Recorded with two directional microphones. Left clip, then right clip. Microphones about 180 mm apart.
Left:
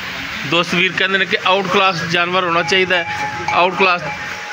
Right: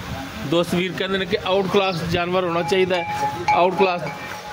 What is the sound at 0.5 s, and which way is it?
A man's voice, 10° right (ahead or behind).